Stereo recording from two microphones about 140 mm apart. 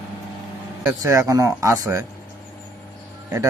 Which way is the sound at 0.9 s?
20° right (ahead or behind).